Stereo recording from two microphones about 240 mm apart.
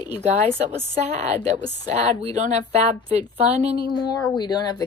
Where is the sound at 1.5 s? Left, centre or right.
Right.